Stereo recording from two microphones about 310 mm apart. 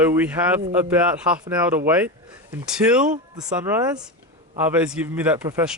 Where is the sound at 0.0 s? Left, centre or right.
Centre.